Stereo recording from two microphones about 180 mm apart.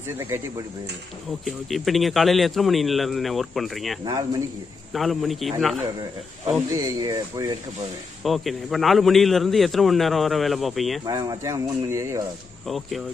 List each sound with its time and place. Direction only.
0.2 s speech: 15° right (ahead or behind)
1.4 s speech: centre (ahead or behind)
4.0 s speech: 20° right (ahead or behind)
4.9 s speech: centre (ahead or behind)
6.7 s speech: 15° right (ahead or behind)
8.2 s speech: centre (ahead or behind)
11.1 s speech: 20° right (ahead or behind)
12.6 s speech: centre (ahead or behind)